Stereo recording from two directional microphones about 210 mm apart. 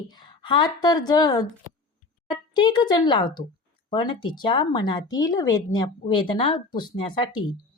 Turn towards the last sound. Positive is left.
turn(degrees=20)  # may be behind; listen again after turning